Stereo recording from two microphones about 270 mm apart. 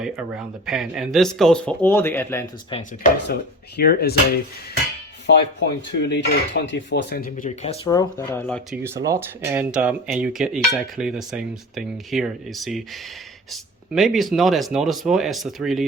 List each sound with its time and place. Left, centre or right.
0.0 s speech: centre
3.8 s speech: left
5.2 s speech: left
7.9 s speech: centre
8.8 s speech: centre